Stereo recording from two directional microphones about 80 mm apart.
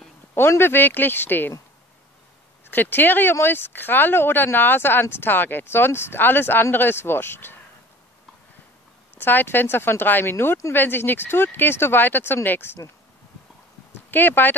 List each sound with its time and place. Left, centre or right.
0.3 s speech: left
2.7 s speech: left
9.2 s speech: left
14.1 s speech: left